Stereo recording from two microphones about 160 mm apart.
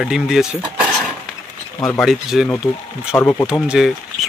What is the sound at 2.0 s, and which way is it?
Speech, centre (ahead or behind).